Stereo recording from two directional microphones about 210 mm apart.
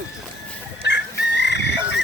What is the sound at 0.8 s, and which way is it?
Chicken, 55° left (ahead or behind).